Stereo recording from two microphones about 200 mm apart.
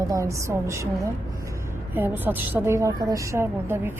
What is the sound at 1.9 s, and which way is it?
A woman's voice, 10° right (ahead or behind).